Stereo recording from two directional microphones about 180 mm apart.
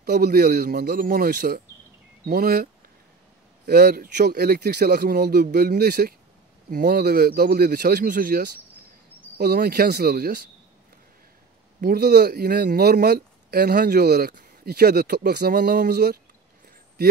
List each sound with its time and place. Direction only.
0.0 s speech: 60° right (ahead or behind)
11.8 s speech: 60° right (ahead or behind)